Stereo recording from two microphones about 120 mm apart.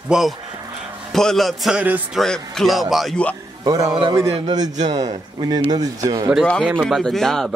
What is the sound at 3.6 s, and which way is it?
Speech, 30° right (ahead or behind).